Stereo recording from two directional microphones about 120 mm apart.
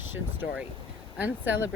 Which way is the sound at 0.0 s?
15° right (ahead or behind).